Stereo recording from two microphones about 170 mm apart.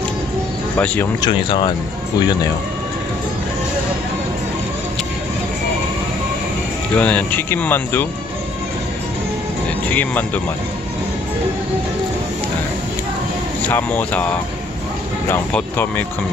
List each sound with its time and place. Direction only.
1.2 s speech: 25° left (ahead or behind)
7.0 s speech: 10° left (ahead or behind)
9.8 s speech: 10° left (ahead or behind)
13.7 s speech: 10° left (ahead or behind)
15.2 s speech: 10° left (ahead or behind)